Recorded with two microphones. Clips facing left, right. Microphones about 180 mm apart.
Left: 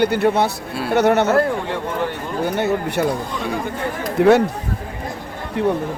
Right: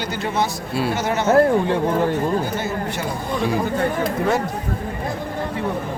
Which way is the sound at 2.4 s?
65° left (ahead or behind).